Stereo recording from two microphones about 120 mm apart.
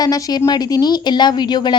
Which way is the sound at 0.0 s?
30° left (ahead or behind).